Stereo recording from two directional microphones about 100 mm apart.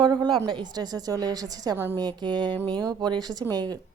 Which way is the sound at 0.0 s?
50° right (ahead or behind).